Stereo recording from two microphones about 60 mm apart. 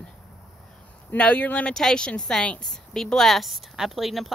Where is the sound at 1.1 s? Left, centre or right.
Left.